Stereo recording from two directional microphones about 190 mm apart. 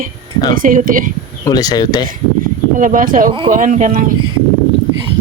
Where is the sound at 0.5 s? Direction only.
45° right (ahead or behind).